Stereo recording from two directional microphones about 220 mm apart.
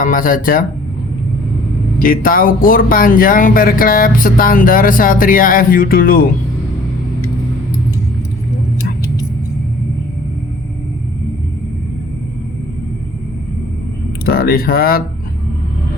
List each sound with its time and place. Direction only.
0.0 s speech: 40° left (ahead or behind)
2.0 s speech: 40° left (ahead or behind)
14.3 s speech: 40° left (ahead or behind)